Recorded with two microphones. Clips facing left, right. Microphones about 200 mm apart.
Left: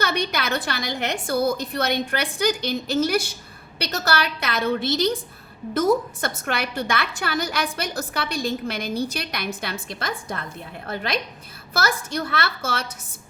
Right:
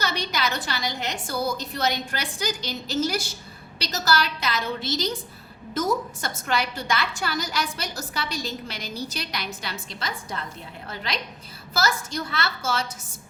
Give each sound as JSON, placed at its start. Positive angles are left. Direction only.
{"t": 0.0, "sound": "a woman's voice", "side_deg": 55}